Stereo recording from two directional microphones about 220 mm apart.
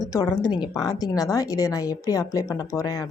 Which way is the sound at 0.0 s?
15° left (ahead or behind).